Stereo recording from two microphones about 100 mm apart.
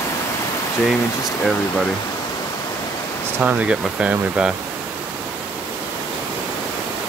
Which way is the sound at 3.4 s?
15° right (ahead or behind).